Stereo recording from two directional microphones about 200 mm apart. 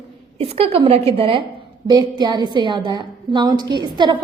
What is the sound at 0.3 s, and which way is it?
A woman's voice, 30° right (ahead or behind).